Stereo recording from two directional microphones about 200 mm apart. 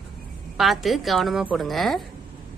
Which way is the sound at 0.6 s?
Centre (ahead or behind).